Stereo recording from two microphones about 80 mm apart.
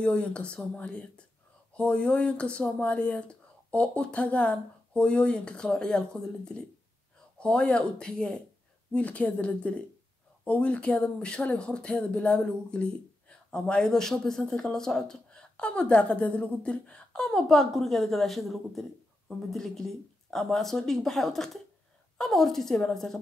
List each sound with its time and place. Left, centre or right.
0.0 s a woman's voice: centre